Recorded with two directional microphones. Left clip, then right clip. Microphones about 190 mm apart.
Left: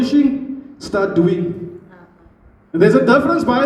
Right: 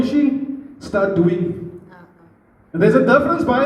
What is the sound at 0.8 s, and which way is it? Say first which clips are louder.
Speech: left 1 dB; 55° left (ahead or behind).